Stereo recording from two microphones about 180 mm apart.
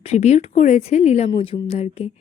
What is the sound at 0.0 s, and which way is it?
A woman's voice, 40° left (ahead or behind).